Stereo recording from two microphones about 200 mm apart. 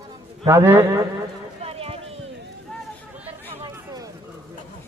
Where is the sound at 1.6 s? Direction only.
30° right (ahead or behind).